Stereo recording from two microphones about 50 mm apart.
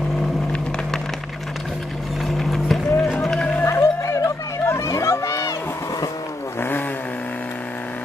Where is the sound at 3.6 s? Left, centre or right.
Left.